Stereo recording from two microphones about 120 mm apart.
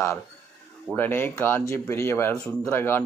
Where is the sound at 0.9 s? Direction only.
20° left (ahead or behind).